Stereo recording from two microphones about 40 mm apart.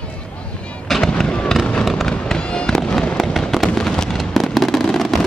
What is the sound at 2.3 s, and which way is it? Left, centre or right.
Fireworks, left.